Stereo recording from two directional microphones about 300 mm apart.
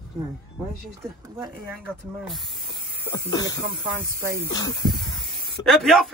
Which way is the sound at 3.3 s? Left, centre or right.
Centre.